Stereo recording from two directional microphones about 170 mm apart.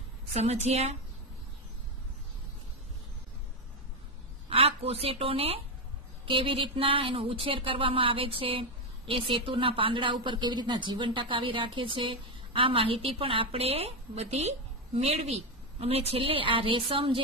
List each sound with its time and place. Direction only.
0.3 s a woman's voice: 40° right (ahead or behind)
4.5 s a woman's voice: 35° right (ahead or behind)